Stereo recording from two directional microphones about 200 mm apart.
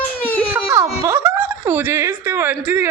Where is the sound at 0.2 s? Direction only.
10° left (ahead or behind).